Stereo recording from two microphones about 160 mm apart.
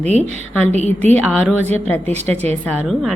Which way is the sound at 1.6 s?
45° right (ahead or behind).